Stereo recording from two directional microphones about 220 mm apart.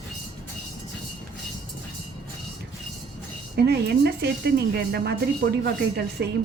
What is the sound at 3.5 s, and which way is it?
Speech, 45° right (ahead or behind).